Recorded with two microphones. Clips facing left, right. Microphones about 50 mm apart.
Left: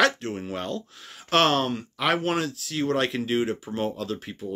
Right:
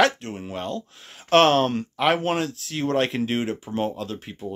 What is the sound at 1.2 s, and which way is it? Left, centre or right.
Speech, right.